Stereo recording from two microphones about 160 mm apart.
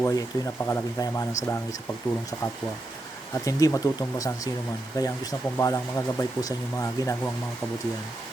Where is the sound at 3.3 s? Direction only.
20° left (ahead or behind).